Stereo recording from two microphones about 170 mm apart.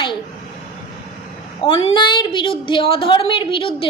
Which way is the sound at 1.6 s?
30° left (ahead or behind).